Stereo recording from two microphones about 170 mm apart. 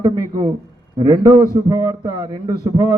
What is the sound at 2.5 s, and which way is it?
Speech, 20° right (ahead or behind).